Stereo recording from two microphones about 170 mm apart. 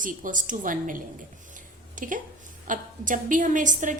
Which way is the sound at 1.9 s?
50° right (ahead or behind).